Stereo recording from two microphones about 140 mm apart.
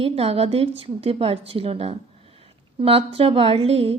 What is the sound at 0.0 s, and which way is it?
A woman's voice, 45° right (ahead or behind).